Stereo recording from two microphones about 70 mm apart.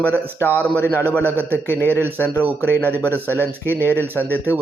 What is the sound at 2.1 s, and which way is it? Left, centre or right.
Speech, left.